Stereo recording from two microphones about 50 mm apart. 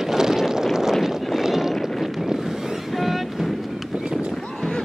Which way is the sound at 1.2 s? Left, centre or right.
Centre.